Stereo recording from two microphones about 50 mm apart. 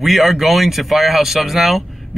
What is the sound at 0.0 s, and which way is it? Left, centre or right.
Speech, centre.